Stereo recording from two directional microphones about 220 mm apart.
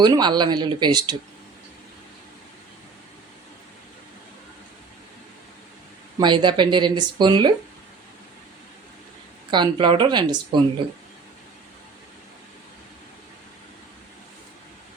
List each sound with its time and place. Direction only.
0.0 s speech: 20° right (ahead or behind)
6.1 s speech: 20° right (ahead or behind)
9.5 s speech: 20° right (ahead or behind)